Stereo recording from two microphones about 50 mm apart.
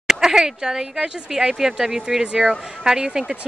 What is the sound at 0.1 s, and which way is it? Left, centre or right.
Speech, centre.